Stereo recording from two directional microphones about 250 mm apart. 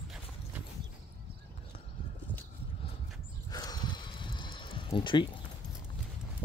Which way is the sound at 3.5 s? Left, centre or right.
Centre.